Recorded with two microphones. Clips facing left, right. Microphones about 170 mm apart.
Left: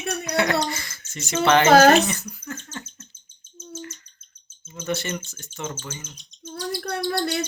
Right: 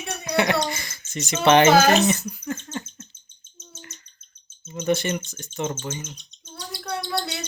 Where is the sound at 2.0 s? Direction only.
20° right (ahead or behind).